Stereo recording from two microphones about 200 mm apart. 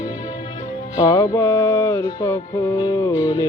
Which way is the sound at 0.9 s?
20° left (ahead or behind).